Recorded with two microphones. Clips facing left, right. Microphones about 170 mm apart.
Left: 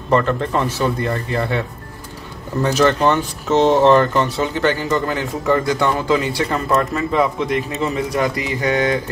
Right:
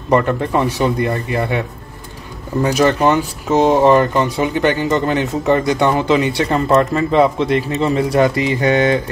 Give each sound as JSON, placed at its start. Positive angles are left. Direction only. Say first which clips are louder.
{"t": 0.1, "sound": "speech", "louder": "right 2 dB", "side_deg": -15}
{"t": 2.6, "sound": "speech", "louder": "right 1 dB", "side_deg": -10}